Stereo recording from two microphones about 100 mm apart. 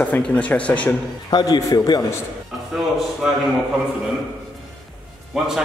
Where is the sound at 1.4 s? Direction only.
35° left (ahead or behind).